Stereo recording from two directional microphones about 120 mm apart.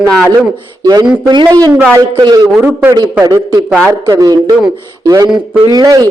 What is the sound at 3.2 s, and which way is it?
A man's voice, 30° right (ahead or behind).